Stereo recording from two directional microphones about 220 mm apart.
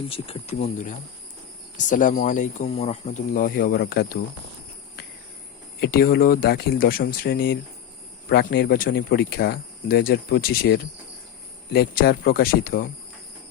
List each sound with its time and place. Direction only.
0.1 s speech: 25° left (ahead or behind); by 4.2 s 45° left (ahead or behind)
5.8 s speech: 45° left (ahead or behind)